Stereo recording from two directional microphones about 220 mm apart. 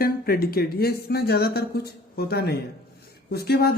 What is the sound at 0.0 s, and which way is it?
Speech, 45° left (ahead or behind).